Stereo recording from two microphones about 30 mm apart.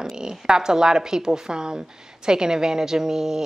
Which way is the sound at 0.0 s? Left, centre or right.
Right.